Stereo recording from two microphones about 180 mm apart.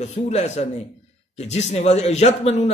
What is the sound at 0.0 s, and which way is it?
A man's voice, 35° left (ahead or behind).